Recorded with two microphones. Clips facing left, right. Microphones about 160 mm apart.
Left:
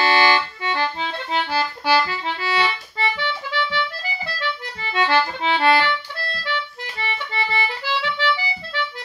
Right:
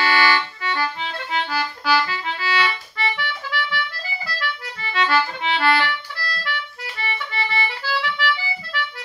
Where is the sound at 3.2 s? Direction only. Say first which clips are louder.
Left 3 dB; 25° left (ahead or behind).